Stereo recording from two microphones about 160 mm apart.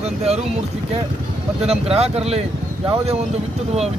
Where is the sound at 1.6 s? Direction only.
40° right (ahead or behind).